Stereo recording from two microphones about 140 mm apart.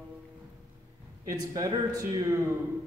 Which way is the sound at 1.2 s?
25° right (ahead or behind).